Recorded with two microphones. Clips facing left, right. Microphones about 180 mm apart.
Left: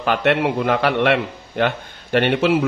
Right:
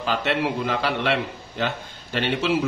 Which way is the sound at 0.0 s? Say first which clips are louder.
Left 6 dB; 60° left (ahead or behind).